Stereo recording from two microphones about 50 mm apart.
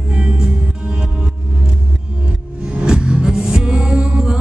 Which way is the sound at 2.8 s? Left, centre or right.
Centre.